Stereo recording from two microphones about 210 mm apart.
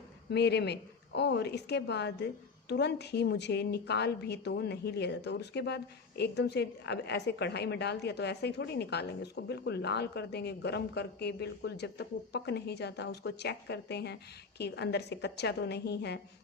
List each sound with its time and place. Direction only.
0.3 s a woman's voice: 55° left (ahead or behind)